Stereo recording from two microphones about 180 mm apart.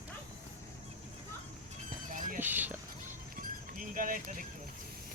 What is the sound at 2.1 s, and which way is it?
Clip-clop, 50° right (ahead or behind).